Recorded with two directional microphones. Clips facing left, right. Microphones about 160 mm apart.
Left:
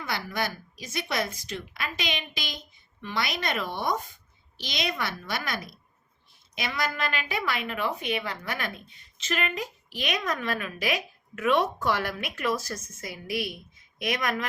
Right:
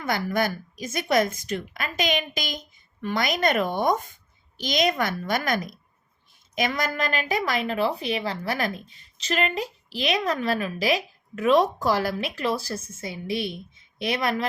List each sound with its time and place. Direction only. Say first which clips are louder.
0.0 s a woman's voice: right 6 dB; 45° right (ahead or behind); by 14.4 s 30° right (ahead or behind)